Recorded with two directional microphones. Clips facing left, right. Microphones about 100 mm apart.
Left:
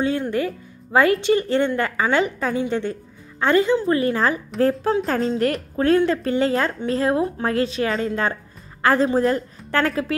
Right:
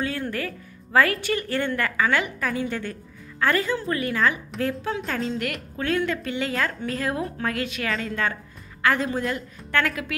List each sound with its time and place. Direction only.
0.0 s a woman's voice: 20° left (ahead or behind)